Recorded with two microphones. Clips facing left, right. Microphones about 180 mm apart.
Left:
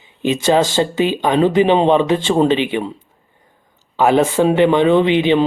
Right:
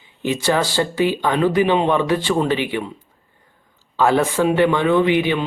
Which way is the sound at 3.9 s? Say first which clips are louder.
Left 3 dB; 20° left (ahead or behind).